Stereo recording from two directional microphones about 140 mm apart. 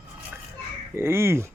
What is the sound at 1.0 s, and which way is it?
Speech, 15° right (ahead or behind).